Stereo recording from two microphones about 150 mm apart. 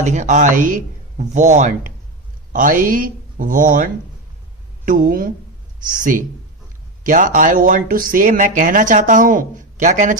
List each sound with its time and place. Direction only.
0.0 s speech: 55° right (ahead or behind)
4.9 s speech: 65° right (ahead or behind)